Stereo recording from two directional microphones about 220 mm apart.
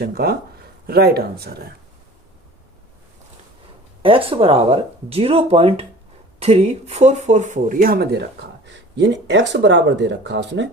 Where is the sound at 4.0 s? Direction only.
25° right (ahead or behind).